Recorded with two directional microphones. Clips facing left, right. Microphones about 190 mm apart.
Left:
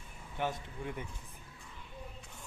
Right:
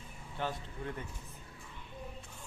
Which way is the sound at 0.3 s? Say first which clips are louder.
Left 2 dB; 15° left (ahead or behind).